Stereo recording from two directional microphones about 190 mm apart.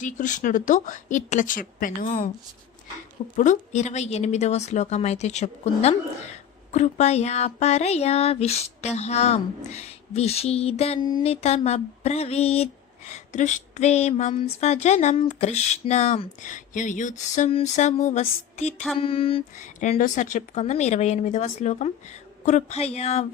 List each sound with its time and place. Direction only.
0.0 s speech: 40° left (ahead or behind)
3.3 s speech: 40° left (ahead or behind)
13.1 s a sound: 40° left (ahead or behind)
14.6 s speech: 35° left (ahead or behind)